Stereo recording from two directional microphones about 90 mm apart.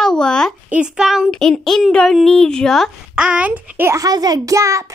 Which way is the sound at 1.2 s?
5° left (ahead or behind).